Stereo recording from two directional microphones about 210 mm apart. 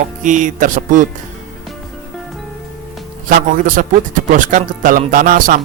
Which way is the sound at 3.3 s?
40° right (ahead or behind).